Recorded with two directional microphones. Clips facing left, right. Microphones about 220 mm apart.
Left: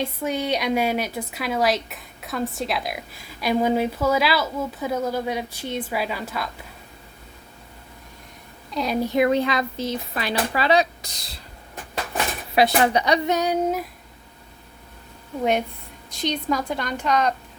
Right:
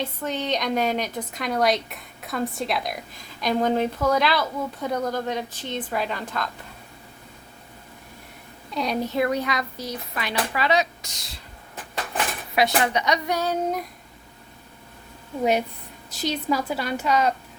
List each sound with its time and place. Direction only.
0.0 s a woman's voice: 10° left (ahead or behind)
8.7 s a woman's voice: centre (ahead or behind)
9.0 s speech: 20° left (ahead or behind); by 11.3 s 35° left (ahead or behind)
12.5 s a woman's voice: 30° left (ahead or behind)
13.3 s a woman's voice: 15° left (ahead or behind)
16.0 s a woman's voice: 5° right (ahead or behind)